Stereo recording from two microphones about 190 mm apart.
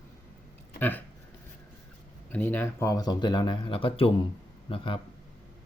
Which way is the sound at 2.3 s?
10° left (ahead or behind).